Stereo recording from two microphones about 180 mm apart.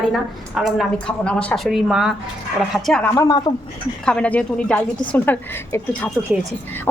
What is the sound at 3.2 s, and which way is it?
Speech, 20° left (ahead or behind).